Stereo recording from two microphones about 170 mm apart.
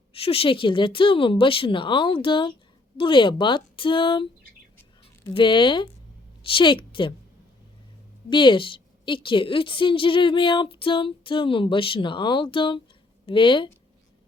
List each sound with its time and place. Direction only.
0.1 s a woman's voice: 35° left (ahead or behind)
8.3 s a woman's voice: 30° left (ahead or behind)